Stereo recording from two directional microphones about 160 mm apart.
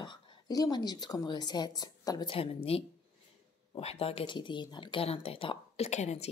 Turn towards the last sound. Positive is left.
turn(degrees=45)  # may be behind; listen again after turning